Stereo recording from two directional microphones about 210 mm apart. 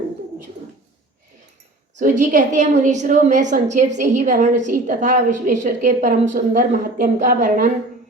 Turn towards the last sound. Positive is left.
turn(degrees=-40)  # may be behind; listen again after turning